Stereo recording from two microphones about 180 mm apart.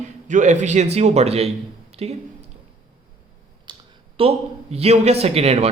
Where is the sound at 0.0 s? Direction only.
45° right (ahead or behind).